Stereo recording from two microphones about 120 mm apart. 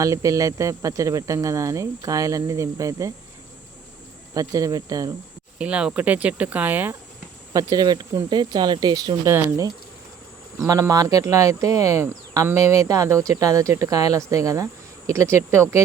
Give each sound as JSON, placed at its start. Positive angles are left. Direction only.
{"t": 0.0, "sound": "speech", "side_deg": -25}
{"t": 4.4, "sound": "speech", "side_deg": -30}
{"t": 5.5, "sound": "speech", "side_deg": -10}
{"t": 7.5, "sound": "speech", "side_deg": -30}
{"t": 9.2, "sound": "speech", "side_deg": -25}